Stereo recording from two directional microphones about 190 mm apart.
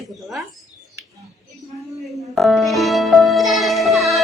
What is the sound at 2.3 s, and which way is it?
Speech, centre (ahead or behind).